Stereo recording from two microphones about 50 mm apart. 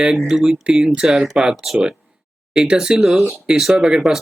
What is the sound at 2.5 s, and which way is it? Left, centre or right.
Speech, centre.